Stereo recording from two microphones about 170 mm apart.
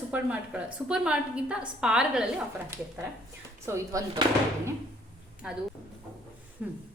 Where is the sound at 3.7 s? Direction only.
15° right (ahead or behind).